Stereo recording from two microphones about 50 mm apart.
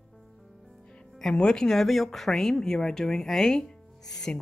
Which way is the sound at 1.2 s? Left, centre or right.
Centre.